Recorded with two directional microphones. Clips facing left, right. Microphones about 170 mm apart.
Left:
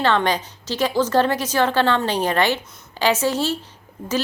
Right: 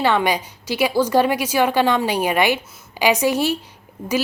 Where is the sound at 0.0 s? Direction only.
10° right (ahead or behind).